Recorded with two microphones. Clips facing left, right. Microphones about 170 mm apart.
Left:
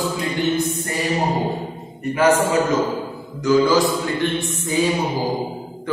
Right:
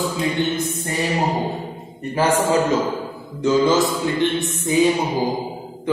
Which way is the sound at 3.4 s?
25° right (ahead or behind).